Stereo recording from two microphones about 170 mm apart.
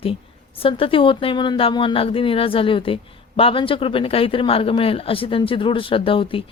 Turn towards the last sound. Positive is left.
turn(degrees=30)  # may be behind; listen again after turning